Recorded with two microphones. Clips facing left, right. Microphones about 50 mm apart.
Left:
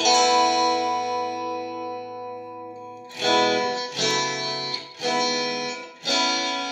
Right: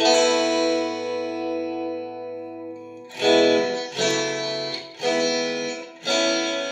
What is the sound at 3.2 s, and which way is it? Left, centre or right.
Music, centre.